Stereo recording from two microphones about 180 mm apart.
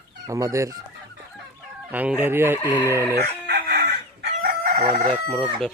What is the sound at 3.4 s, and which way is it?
Chicken, 60° right (ahead or behind).